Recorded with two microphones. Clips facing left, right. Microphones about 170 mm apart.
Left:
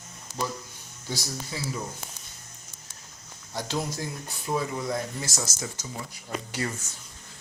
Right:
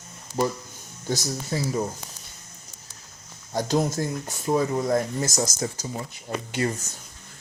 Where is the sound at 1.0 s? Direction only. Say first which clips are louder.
Right 6 dB; 45° right (ahead or behind).